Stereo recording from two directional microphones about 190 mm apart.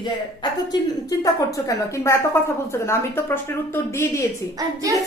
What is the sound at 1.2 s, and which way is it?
Speech, 15° left (ahead or behind).